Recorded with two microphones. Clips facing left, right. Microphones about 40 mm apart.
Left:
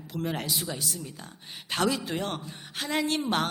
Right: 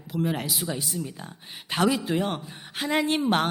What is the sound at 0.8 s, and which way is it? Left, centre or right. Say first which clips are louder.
A man's voice: right 4 dB; centre.